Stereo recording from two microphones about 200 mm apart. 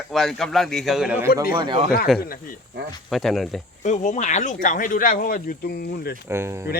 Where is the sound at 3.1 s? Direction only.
Centre (ahead or behind).